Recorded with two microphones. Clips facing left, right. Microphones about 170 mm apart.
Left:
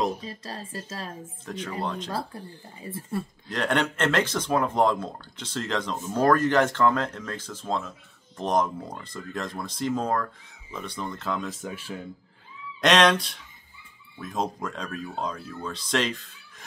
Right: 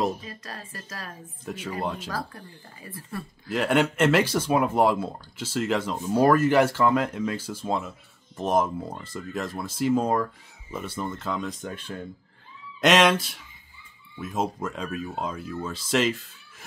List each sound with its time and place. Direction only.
0.2 s speech: 30° left (ahead or behind)
1.4 s speech: 5° right (ahead or behind)
2.0 s speech: 25° left (ahead or behind)
3.4 s speech: 5° right (ahead or behind)